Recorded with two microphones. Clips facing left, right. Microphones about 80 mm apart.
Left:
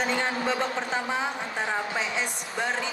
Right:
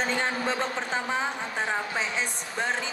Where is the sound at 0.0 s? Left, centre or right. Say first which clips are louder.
Left 1 dB; right.